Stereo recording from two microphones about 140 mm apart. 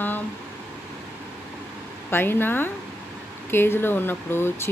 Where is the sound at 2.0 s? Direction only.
15° left (ahead or behind).